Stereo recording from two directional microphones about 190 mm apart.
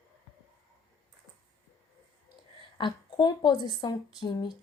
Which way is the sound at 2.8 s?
25° left (ahead or behind).